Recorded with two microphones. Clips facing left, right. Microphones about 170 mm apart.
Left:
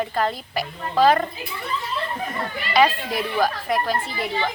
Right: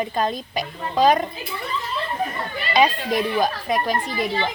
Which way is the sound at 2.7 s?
20° right (ahead or behind).